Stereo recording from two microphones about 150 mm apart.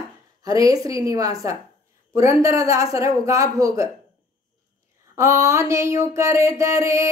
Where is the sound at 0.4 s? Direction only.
25° right (ahead or behind).